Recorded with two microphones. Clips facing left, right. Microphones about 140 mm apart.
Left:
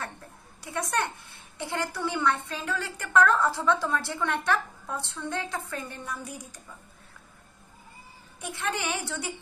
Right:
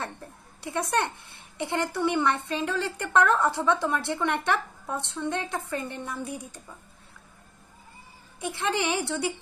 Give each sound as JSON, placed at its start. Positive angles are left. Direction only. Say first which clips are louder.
{"t": 0.6, "sound": "a woman's voice", "louder": "right 3 dB", "side_deg": -25}
{"t": 8.4, "sound": "a woman's voice", "louder": "right 4 dB", "side_deg": -25}